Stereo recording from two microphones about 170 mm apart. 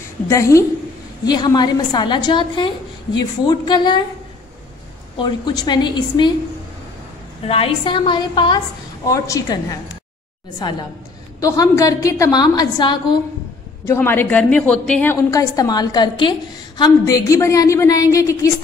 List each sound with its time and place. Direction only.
0.3 s a woman's voice: 20° left (ahead or behind)
5.1 s a woman's voice: 25° left (ahead or behind)
7.4 s a woman's voice: 35° left (ahead or behind)
11.3 s a woman's voice: 20° left (ahead or behind)
13.8 s a woman's voice: 15° left (ahead or behind)